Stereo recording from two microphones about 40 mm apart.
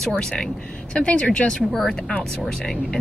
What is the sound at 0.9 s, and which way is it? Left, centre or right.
Speech, left.